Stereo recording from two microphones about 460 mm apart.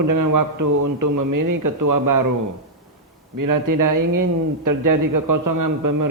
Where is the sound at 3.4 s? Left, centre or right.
Right.